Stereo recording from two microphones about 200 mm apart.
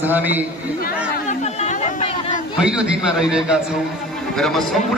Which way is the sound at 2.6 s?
5° right (ahead or behind).